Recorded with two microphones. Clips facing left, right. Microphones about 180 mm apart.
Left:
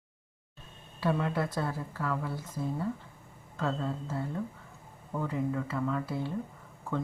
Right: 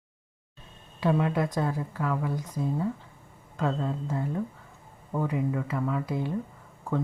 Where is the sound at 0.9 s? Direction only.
15° right (ahead or behind).